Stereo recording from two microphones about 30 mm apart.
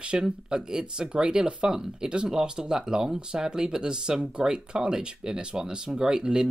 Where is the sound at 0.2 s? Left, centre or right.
Right.